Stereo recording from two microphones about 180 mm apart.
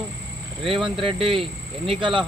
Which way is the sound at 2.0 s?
25° right (ahead or behind).